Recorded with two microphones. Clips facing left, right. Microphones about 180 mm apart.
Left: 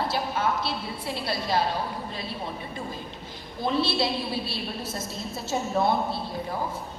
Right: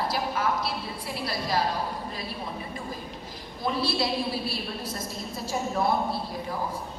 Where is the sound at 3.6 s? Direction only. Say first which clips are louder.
Left 2 dB; 25° left (ahead or behind).